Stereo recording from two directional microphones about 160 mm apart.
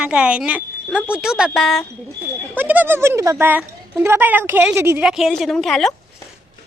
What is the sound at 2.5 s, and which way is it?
Speech, 10° right (ahead or behind).